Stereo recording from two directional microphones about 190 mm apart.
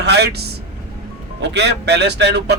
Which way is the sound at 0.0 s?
60° right (ahead or behind).